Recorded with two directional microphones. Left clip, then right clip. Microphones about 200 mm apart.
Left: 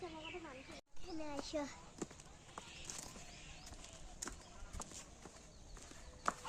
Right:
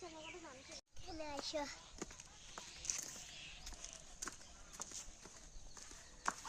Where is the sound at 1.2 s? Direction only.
10° right (ahead or behind).